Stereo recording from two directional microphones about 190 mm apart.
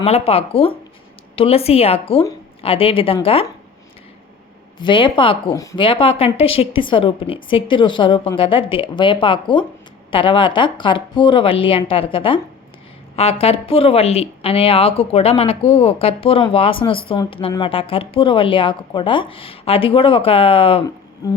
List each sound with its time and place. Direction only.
0.0 s a woman's voice: 30° left (ahead or behind)
4.8 s a woman's voice: 25° left (ahead or behind)
21.2 s a woman's voice: 20° left (ahead or behind)